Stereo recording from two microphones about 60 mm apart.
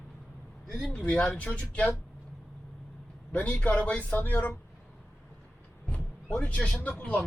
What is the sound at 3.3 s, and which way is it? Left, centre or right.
Speech, left.